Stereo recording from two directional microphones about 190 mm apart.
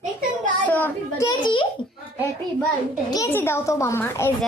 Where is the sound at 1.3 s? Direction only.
25° left (ahead or behind).